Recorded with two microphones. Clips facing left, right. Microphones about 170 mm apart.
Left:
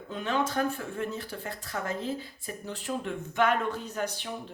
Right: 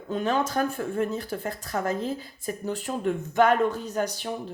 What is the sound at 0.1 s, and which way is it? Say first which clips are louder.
Speech: right 4 dB; 40° right (ahead or behind).